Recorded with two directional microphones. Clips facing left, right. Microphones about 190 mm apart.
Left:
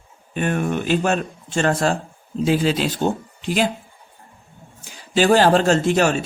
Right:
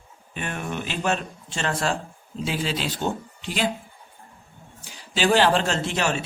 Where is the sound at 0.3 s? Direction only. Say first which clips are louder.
Left 9 dB; 50° left (ahead or behind).